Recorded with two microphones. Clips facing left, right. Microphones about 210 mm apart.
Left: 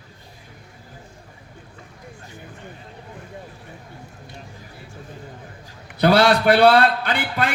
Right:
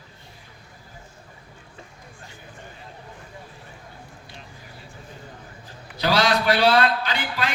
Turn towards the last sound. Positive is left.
turn(degrees=55)  # may be behind; listen again after turning